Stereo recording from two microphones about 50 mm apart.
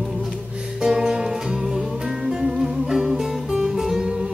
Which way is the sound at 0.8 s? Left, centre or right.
Centre.